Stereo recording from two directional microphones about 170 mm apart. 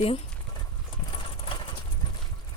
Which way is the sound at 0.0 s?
35° left (ahead or behind).